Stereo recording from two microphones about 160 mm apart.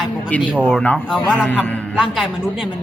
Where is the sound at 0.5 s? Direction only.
5° right (ahead or behind).